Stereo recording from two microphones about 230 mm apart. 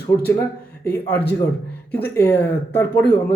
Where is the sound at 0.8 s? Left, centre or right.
Centre.